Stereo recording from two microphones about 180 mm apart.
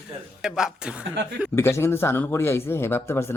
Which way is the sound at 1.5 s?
15° left (ahead or behind).